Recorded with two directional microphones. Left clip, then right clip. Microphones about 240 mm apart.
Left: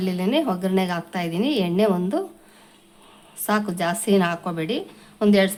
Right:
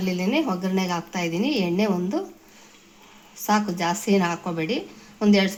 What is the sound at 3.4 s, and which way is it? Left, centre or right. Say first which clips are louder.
A woman's voice: even; centre.